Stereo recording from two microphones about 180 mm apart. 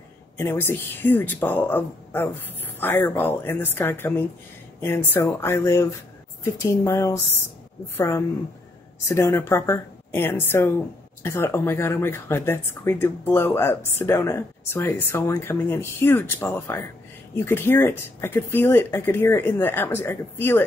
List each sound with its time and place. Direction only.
0.4 s speech: 15° left (ahead or behind)
9.0 s speech: 15° left (ahead or behind)